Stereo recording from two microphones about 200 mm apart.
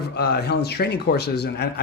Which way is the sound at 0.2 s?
55° left (ahead or behind).